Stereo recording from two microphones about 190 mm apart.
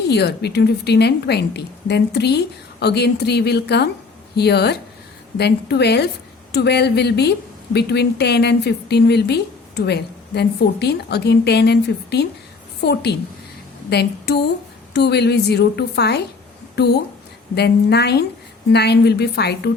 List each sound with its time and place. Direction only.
0.1 s a woman's voice: 60° left (ahead or behind)